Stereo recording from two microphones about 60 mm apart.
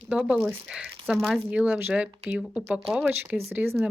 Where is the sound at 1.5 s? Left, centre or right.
Right.